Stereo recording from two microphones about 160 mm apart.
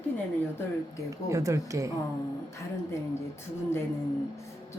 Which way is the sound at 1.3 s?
20° right (ahead or behind).